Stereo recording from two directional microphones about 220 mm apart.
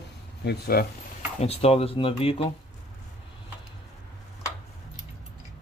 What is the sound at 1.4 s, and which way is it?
Speech, 30° left (ahead or behind).